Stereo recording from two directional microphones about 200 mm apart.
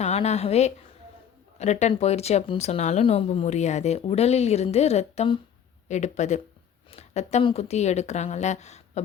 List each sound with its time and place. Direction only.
0.0 s a woman's voice: 35° left (ahead or behind)